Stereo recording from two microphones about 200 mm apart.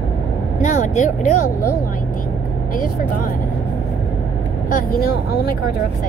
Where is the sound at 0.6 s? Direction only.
35° left (ahead or behind).